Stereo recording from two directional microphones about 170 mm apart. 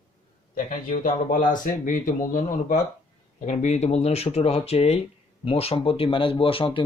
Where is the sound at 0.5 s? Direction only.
55° left (ahead or behind).